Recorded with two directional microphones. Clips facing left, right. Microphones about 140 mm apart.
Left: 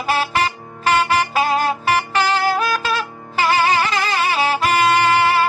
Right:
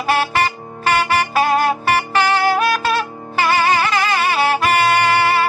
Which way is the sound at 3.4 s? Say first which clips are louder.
Right 1 dB; 55° right (ahead or behind).